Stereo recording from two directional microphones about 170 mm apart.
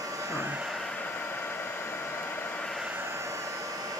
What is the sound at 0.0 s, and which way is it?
Hair dryer, 20° right (ahead or behind).